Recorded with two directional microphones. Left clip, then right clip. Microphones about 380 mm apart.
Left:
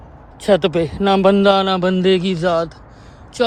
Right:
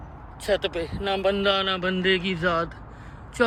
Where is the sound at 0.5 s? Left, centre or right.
Centre.